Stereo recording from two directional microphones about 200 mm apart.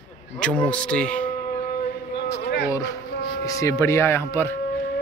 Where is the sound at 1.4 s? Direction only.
45° left (ahead or behind).